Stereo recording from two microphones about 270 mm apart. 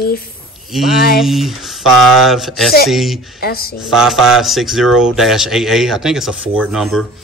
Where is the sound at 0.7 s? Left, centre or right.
Centre.